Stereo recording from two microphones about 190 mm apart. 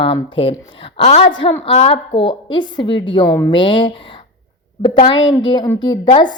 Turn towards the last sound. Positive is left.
turn(degrees=25)  # may be behind; listen again after turning